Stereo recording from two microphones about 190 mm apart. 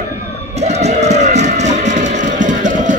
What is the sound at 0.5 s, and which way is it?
Music, 35° right (ahead or behind).